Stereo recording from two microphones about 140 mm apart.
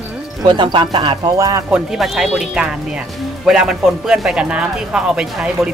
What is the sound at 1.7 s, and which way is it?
Speech, centre (ahead or behind).